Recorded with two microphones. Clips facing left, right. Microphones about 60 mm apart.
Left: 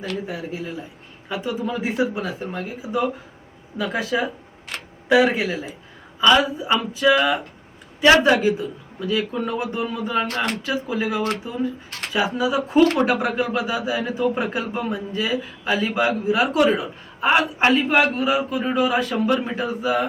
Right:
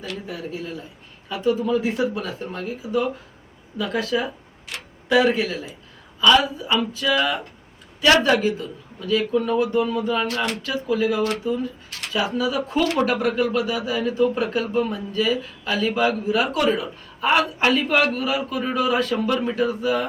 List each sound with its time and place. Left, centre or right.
1.3 s a man's voice: centre
10.2 s speech: left
10.6 s a man's voice: left